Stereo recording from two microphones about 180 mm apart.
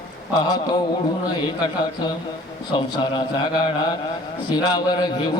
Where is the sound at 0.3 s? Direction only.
25° left (ahead or behind).